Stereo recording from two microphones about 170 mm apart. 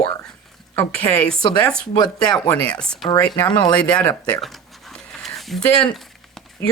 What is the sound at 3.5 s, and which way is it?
Speech, 25° left (ahead or behind).